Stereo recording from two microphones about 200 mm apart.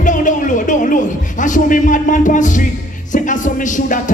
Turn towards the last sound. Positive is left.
turn(degrees=40)  # may be behind; listen again after turning